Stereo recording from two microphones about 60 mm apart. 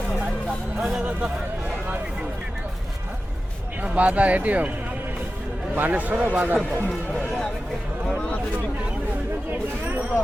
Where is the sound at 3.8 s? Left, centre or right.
Right.